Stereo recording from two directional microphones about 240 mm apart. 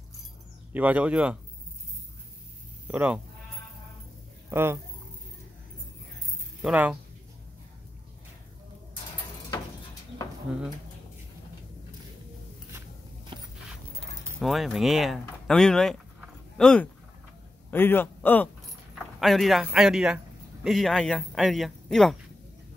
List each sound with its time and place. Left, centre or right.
0.7 s speech: centre
2.9 s speech: centre
4.5 s speech: centre
6.6 s speech: centre
10.5 s speech: centre
13.3 s walk: right
14.4 s a man's voice: centre